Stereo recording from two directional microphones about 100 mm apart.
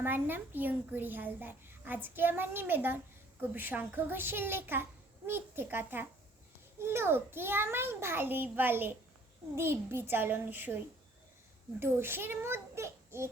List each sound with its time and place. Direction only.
0.0 s a child's voice: 20° right (ahead or behind)
11.8 s a child's voice: 25° right (ahead or behind)